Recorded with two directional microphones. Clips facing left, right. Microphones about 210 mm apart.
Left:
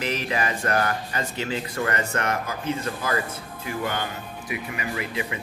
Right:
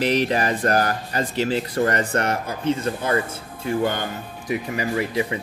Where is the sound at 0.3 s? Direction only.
35° right (ahead or behind).